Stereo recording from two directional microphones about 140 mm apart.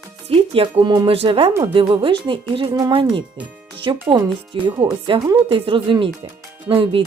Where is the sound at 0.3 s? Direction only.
40° right (ahead or behind).